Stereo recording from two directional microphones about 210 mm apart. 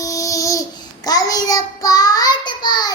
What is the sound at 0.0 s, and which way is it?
Babbling, 15° left (ahead or behind).